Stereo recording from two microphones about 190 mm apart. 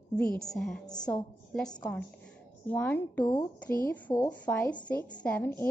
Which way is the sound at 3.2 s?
25° left (ahead or behind).